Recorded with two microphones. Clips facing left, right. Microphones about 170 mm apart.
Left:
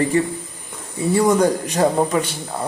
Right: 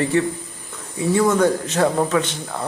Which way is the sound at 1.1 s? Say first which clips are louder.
Left 1 dB; 15° left (ahead or behind).